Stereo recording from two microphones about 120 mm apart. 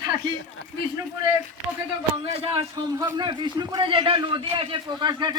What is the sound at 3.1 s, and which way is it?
Speech, 35° right (ahead or behind).